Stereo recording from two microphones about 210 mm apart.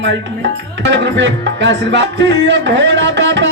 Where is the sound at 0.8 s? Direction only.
60° right (ahead or behind).